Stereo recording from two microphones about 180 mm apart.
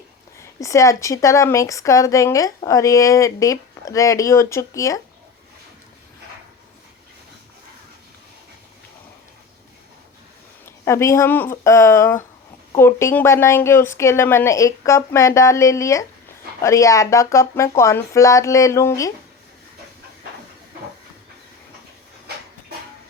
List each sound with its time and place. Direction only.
0.3 s a woman's voice: 15° left (ahead or behind)
10.7 s a woman's voice: 15° left (ahead or behind)